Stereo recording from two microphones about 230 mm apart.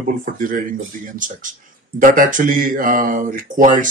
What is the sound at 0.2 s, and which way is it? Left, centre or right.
Speech, right.